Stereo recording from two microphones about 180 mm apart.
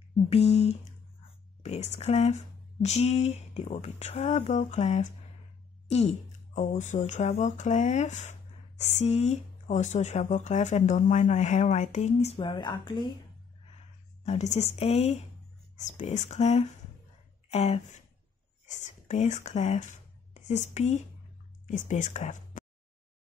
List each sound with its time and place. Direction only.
0.3 s speech: 35° left (ahead or behind)
1.6 s a sound: 35° left (ahead or behind)
2.0 s speech: 35° left (ahead or behind)
12.4 s a woman's voice: 25° left (ahead or behind)
14.2 s speech: 40° left (ahead or behind)